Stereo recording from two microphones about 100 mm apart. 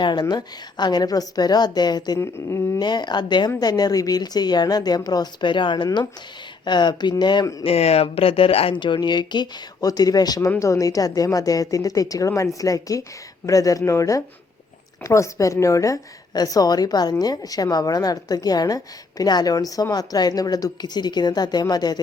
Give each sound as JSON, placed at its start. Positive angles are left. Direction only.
{"t": 0.0, "sound": "speech", "side_deg": 45}
{"t": 7.6, "sound": "a woman's voice", "side_deg": 85}